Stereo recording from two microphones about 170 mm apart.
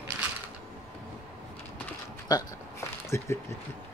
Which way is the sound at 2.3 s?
25° left (ahead or behind).